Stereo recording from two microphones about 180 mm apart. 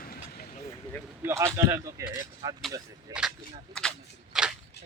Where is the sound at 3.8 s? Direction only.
5° left (ahead or behind).